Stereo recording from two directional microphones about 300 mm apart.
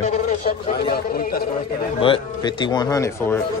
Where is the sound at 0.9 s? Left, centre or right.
Left.